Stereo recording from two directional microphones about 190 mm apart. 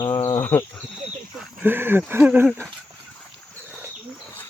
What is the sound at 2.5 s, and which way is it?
Cricket, 10° left (ahead or behind).